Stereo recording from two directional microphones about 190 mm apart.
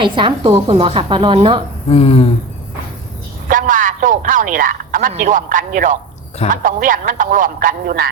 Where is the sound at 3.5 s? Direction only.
45° right (ahead or behind).